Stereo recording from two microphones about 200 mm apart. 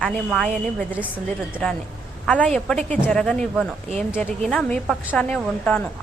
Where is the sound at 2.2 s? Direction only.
5° left (ahead or behind).